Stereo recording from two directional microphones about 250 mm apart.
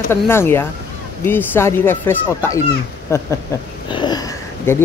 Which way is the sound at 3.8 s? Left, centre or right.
Centre.